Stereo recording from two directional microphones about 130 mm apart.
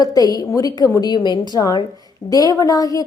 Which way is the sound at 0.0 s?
30° left (ahead or behind).